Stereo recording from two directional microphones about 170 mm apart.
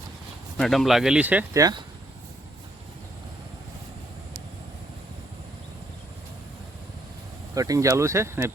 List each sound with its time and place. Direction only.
0.5 s speech: centre (ahead or behind)
7.5 s speech: 20° right (ahead or behind)